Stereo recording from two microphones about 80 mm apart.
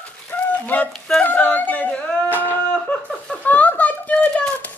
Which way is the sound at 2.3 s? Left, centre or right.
Left.